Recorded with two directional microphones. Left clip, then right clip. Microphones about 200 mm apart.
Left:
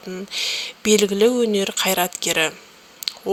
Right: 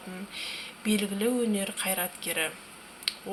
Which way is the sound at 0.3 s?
45° left (ahead or behind).